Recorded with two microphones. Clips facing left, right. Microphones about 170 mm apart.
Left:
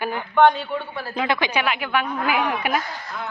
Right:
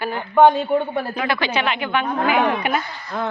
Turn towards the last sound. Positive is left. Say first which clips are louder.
# right 7 dB
turn(degrees=-35)  # may be behind; listen again after turning